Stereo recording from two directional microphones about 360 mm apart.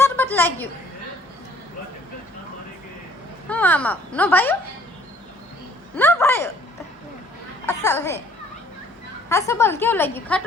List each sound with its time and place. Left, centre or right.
0.0 s a sound: centre
3.5 s speech: centre
6.0 s speech: centre
7.8 s speech: centre
9.5 s speech: centre